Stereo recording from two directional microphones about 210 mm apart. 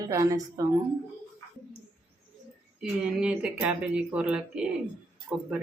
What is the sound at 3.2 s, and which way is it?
Speech, 5° right (ahead or behind).